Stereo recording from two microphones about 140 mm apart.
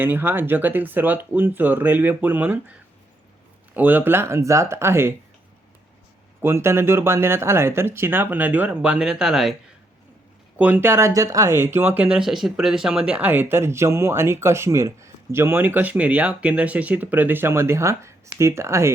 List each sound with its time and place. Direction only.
0.0 s speech: 15° right (ahead or behind)
3.8 s speech: 15° right (ahead or behind)
6.4 s speech: 15° right (ahead or behind)
10.6 s speech: 15° right (ahead or behind)
12.1 s speech: 5° right (ahead or behind); by 18.9 s 20° right (ahead or behind)